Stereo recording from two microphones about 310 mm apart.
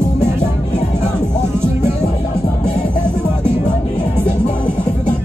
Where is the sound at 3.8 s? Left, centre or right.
Left.